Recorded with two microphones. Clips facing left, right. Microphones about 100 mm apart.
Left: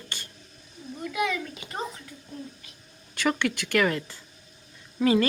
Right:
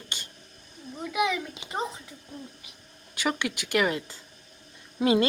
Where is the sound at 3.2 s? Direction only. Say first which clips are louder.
Left 3 dB; 15° right (ahead or behind).